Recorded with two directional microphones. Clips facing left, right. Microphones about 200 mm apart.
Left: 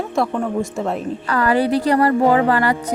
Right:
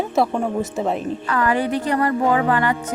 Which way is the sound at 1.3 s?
40° left (ahead or behind).